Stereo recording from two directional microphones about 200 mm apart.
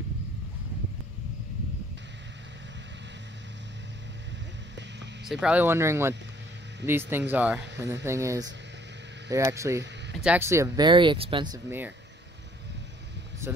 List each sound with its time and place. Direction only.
5.3 s speech: 5° right (ahead or behind)